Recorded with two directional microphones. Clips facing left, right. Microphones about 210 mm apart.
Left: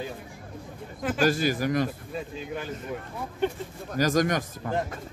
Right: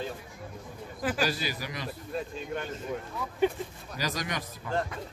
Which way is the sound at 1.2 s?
50° left (ahead or behind).